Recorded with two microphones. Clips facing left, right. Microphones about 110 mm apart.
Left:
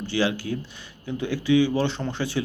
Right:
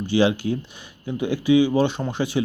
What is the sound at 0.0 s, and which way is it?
Speech, 15° right (ahead or behind).